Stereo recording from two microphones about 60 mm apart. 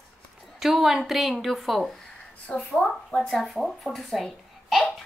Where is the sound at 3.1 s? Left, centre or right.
Centre.